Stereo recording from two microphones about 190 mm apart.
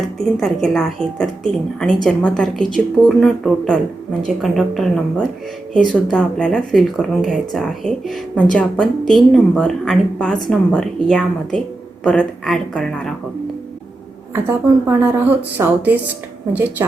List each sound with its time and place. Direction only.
0.3 s speech: centre (ahead or behind)
14.4 s a woman's voice: 10° right (ahead or behind)